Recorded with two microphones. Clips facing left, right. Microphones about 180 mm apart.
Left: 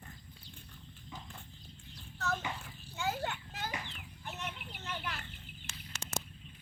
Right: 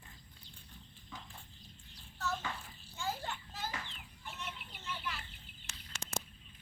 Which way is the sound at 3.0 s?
70° left (ahead or behind).